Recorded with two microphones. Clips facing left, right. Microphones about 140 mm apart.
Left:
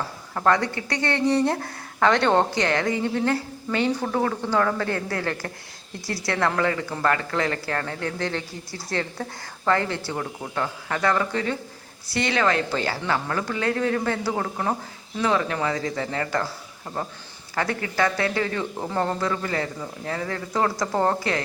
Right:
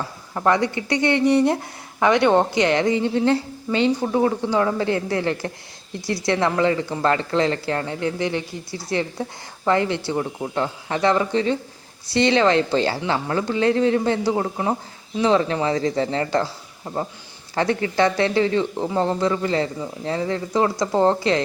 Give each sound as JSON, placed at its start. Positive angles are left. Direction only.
{"t": 0.3, "sound": "speech", "side_deg": -15}
{"t": 16.8, "sound": "speech", "side_deg": -15}
{"t": 17.5, "sound": "speech", "side_deg": -25}